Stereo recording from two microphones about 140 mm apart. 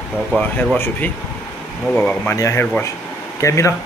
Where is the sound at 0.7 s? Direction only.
15° left (ahead or behind).